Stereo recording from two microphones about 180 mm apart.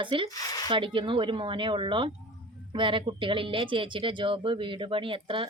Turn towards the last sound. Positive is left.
turn(degrees=-30)  # may be behind; listen again after turning